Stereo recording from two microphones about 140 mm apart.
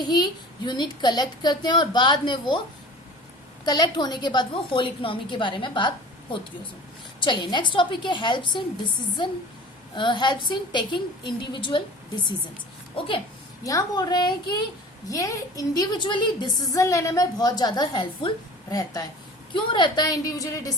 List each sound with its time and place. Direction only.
0.0 s a woman's voice: 30° left (ahead or behind)
3.7 s a woman's voice: 30° left (ahead or behind)
7.2 s a woman's voice: 35° left (ahead or behind)
9.9 s a woman's voice: 35° left (ahead or behind)
13.7 s a woman's voice: 25° left (ahead or behind)